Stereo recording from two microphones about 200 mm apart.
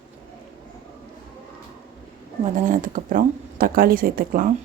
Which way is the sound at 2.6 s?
40° right (ahead or behind).